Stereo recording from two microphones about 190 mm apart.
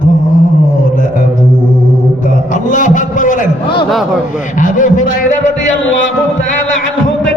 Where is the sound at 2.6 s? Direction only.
40° left (ahead or behind).